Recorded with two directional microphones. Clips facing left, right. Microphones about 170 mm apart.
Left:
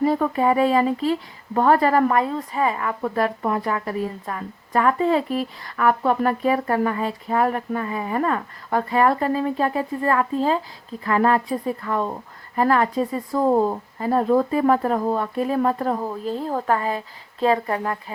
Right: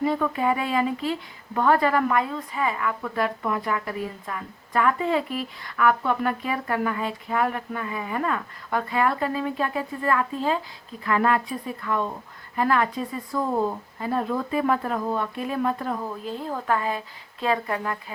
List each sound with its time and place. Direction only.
0.0 s speech: 35° left (ahead or behind)